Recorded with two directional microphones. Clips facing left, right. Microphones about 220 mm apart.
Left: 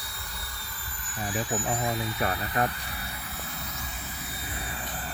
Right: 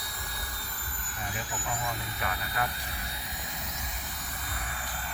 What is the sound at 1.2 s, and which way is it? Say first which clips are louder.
Speech: left 8 dB; 35° left (ahead or behind).